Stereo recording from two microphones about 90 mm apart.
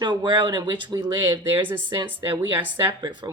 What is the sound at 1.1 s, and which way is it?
Speech, 35° right (ahead or behind).